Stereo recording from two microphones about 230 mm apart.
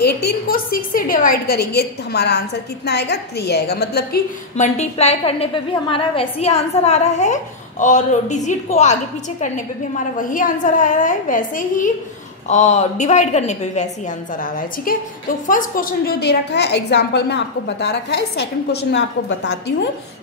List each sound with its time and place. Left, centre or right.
0.0 s a woman's voice: left
4.6 s a woman's voice: left
9.9 s a woman's voice: left